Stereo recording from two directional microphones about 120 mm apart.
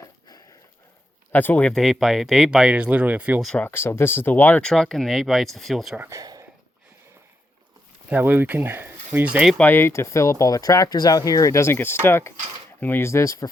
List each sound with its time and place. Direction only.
1.3 s speech: 15° left (ahead or behind)
1.7 s speech: centre (ahead or behind)
3.6 s speech: 20° left (ahead or behind); by 6.0 s centre (ahead or behind)
6.0 s speech: 25° right (ahead or behind)
8.1 s speech: 15° right (ahead or behind)
9.6 s speech: 15° left (ahead or behind)